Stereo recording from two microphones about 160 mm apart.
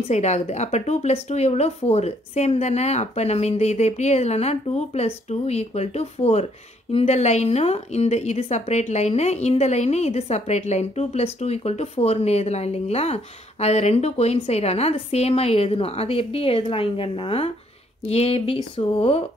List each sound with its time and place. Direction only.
0.1 s speech: 45° left (ahead or behind)